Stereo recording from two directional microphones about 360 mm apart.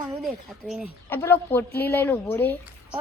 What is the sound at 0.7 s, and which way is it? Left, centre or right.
Speech, centre.